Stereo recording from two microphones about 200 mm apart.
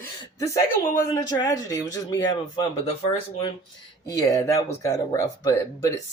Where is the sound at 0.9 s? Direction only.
20° left (ahead or behind).